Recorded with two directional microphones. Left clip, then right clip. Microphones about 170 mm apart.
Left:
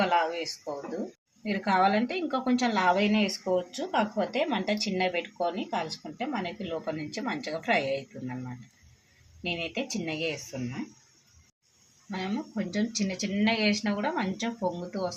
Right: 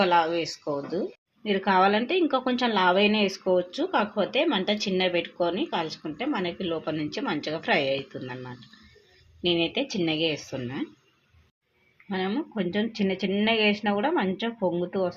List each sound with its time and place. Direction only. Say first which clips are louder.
0.0 s speech: right 4 dB; 50° right (ahead or behind)
1.5 s speech: right 3 dB; 40° right (ahead or behind)
9.4 s speech: right 7 dB; 40° right (ahead or behind)
12.1 s speech: right 5 dB; 40° right (ahead or behind)